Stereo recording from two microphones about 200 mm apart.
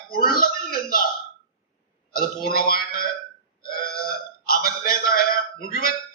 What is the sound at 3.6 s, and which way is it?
Burping, 45° left (ahead or behind).